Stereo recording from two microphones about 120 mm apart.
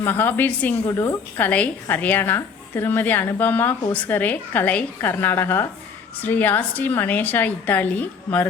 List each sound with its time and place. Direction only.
0.0 s a woman's voice: 15° left (ahead or behind)